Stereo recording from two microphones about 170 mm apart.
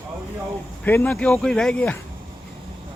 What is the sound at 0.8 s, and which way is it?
Speech, 10° left (ahead or behind).